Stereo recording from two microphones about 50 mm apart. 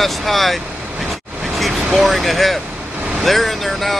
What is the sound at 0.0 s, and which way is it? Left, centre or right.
Speech, centre.